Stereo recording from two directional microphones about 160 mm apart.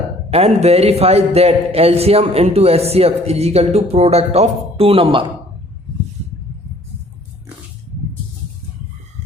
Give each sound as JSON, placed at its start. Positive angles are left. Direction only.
{"t": 0.3, "sound": "speech", "side_deg": -40}